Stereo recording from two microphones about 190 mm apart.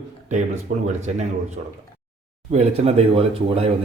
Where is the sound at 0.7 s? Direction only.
45° right (ahead or behind).